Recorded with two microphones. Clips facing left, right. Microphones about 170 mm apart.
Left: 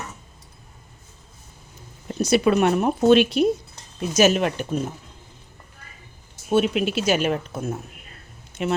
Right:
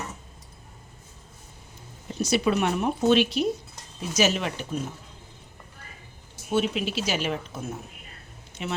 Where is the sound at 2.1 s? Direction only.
55° left (ahead or behind).